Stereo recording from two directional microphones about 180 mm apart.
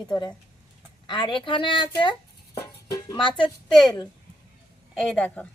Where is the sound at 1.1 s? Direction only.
25° left (ahead or behind).